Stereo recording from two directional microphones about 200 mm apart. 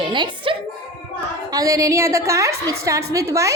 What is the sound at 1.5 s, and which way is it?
A woman's voice, 20° right (ahead or behind).